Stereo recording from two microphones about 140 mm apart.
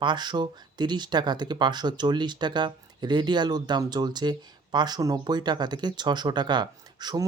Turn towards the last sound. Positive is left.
turn(degrees=-30)  # may be behind; listen again after turning